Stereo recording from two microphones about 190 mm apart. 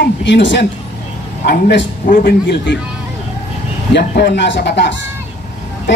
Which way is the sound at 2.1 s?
45° left (ahead or behind).